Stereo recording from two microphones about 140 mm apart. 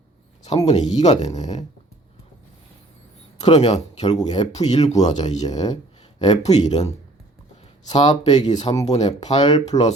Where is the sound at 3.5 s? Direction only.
55° left (ahead or behind).